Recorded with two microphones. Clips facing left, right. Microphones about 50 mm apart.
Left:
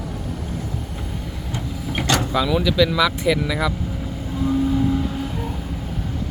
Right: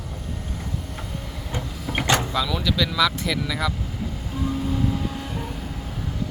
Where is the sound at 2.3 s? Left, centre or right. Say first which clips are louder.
Left 5 dB; centre.